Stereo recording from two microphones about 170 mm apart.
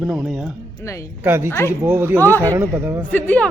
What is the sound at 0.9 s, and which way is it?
Speech, 15° left (ahead or behind).